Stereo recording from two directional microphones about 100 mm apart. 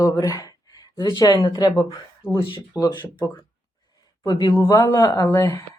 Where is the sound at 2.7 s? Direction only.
15° right (ahead or behind).